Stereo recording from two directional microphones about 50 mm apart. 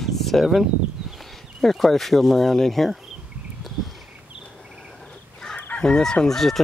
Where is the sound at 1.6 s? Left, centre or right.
Centre.